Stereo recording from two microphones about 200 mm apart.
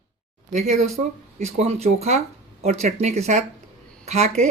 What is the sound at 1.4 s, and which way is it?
Speech, 30° right (ahead or behind).